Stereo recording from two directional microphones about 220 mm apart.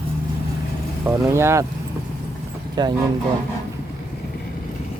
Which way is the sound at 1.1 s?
10° right (ahead or behind).